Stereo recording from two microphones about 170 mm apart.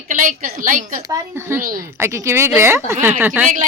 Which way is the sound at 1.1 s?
15° right (ahead or behind).